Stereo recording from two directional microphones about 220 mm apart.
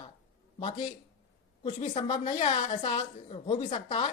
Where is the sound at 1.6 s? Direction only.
20° left (ahead or behind).